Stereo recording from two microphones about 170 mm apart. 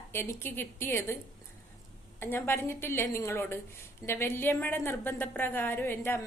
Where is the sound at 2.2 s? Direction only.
15° left (ahead or behind).